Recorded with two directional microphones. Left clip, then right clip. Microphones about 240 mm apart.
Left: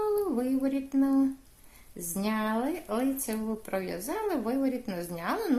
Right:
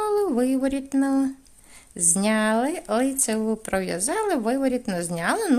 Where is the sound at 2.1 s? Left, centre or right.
Right.